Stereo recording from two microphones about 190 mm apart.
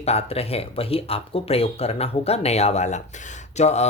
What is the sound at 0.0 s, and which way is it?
Speech, 35° left (ahead or behind).